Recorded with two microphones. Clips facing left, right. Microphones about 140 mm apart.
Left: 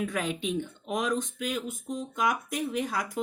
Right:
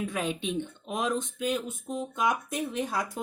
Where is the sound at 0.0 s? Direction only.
25° right (ahead or behind).